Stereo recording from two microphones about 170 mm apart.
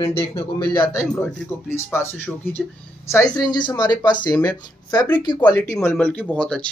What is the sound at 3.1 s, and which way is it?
Speech, 25° left (ahead or behind).